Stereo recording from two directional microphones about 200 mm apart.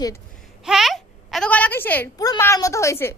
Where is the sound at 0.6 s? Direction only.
Centre (ahead or behind).